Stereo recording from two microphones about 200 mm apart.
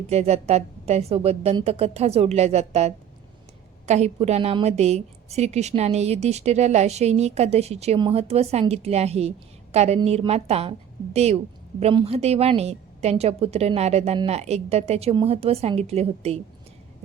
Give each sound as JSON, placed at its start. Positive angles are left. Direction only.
{"t": 0.1, "sound": "a woman's voice", "side_deg": -30}